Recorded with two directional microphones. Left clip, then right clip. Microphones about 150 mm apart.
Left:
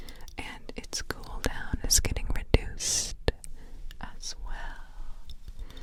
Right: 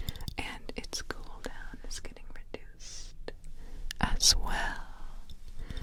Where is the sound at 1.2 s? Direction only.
35° left (ahead or behind); by 2.6 s 65° left (ahead or behind).